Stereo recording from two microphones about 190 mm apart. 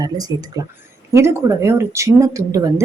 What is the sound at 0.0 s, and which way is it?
A woman's voice, 20° right (ahead or behind).